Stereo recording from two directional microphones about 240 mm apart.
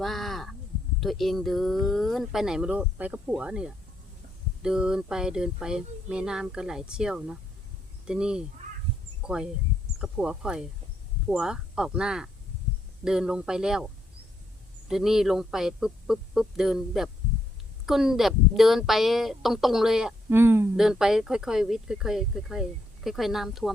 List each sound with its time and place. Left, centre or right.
0.0 s a sound: centre
0.9 s a woman's voice: centre
14.8 s a woman's voice: centre